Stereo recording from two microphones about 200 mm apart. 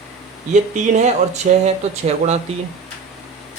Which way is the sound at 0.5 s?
35° right (ahead or behind).